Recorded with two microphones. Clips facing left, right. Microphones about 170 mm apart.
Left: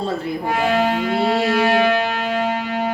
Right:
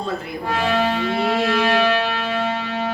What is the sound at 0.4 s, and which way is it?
Music, 15° left (ahead or behind).